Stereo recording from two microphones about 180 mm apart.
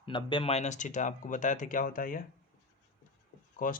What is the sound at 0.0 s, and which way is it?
Speech, 25° left (ahead or behind).